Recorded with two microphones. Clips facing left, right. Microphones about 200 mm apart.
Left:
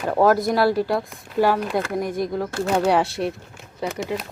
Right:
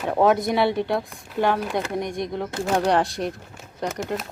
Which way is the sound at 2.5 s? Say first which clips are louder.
Right 1 dB; 15° right (ahead or behind).